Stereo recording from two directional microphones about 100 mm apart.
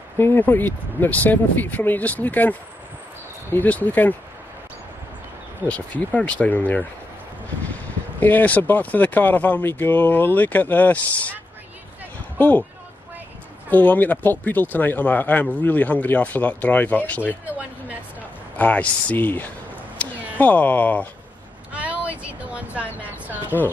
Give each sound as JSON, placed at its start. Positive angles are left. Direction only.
{"t": 0.2, "sound": "speech", "side_deg": 20}
{"t": 3.5, "sound": "speech", "side_deg": 15}
{"t": 5.7, "sound": "speech", "side_deg": 15}
{"t": 12.4, "sound": "speech", "side_deg": 15}
{"t": 13.7, "sound": "speech", "side_deg": 15}
{"t": 18.6, "sound": "speech", "side_deg": 15}
{"t": 21.7, "sound": "a sound", "side_deg": -15}
{"t": 23.5, "sound": "speech", "side_deg": 20}